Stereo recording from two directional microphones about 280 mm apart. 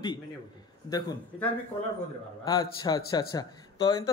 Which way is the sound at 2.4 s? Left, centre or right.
Centre.